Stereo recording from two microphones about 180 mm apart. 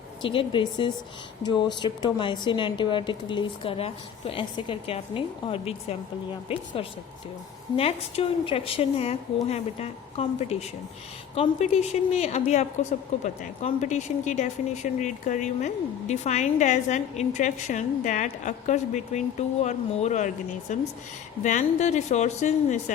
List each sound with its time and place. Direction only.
0.2 s a woman's voice: 30° left (ahead or behind)
7.8 s speech: 35° left (ahead or behind)